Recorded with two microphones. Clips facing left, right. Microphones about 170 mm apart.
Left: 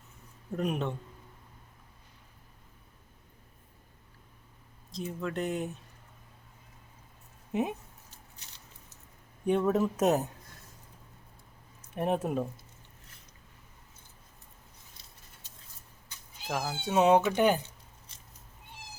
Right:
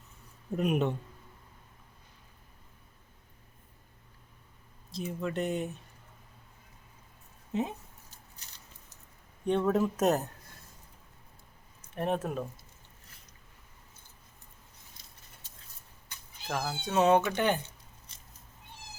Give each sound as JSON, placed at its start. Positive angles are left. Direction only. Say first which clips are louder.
{"t": 0.5, "sound": "a man's voice", "louder": "right 3 dB", "side_deg": -10}
{"t": 4.9, "sound": "speech", "louder": "right 1 dB", "side_deg": 0}
{"t": 7.5, "sound": "speech", "louder": "left 1 dB", "side_deg": 15}
{"t": 9.5, "sound": "speech", "louder": "left 1 dB", "side_deg": 5}
{"t": 11.9, "sound": "speech", "louder": "left 2 dB", "side_deg": 10}
{"t": 16.5, "sound": "speech", "louder": "left 1 dB", "side_deg": 10}